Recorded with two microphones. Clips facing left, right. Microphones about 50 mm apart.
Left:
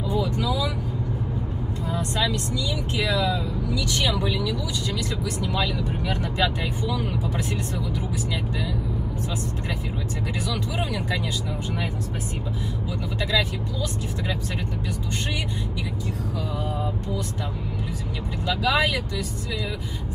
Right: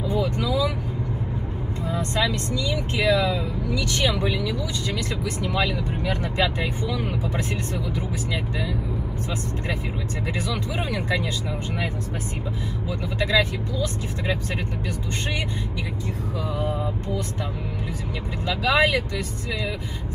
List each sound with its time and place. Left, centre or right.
0.1 s vehicle: right
1.9 s speech: right
10.5 s speech: right
13.2 s speech: right
18.5 s speech: right